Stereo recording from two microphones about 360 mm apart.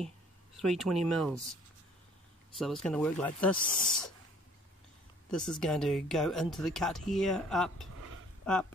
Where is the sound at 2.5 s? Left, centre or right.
Centre.